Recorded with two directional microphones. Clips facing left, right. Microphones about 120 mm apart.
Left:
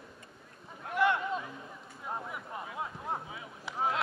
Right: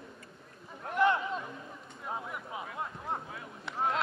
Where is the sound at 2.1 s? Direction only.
5° right (ahead or behind).